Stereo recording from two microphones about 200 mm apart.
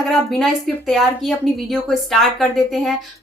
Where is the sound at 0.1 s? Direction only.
Centre (ahead or behind).